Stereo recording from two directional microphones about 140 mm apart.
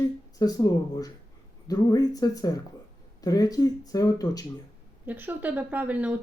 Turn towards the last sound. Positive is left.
turn(degrees=-10)  # may be behind; listen again after turning